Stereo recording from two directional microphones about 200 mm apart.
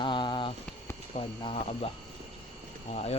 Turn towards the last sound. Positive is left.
turn(degrees=30)  # may be behind; listen again after turning